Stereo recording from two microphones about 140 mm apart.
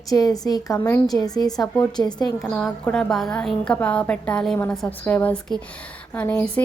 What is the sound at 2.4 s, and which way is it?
A woman's voice, centre (ahead or behind).